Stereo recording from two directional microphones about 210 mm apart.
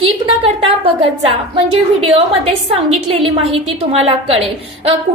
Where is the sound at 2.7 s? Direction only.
30° right (ahead or behind).